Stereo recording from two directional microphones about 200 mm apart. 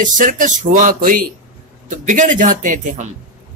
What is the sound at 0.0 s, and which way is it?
A man's voice, 40° right (ahead or behind).